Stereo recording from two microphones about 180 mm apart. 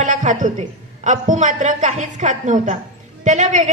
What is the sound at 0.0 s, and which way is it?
Speech, 45° right (ahead or behind).